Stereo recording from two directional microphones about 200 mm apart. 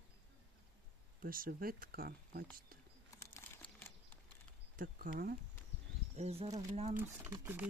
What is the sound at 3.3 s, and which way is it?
Crumpling, 10° left (ahead or behind).